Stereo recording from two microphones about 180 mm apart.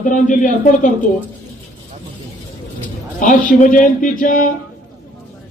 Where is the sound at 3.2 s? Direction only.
45° left (ahead or behind).